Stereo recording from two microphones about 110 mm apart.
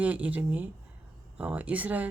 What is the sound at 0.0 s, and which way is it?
Speech, 15° right (ahead or behind).